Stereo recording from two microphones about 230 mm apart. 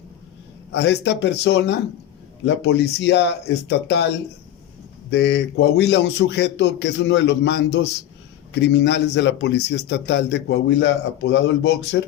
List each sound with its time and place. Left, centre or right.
0.7 s a man's voice: left
5.1 s a man's voice: left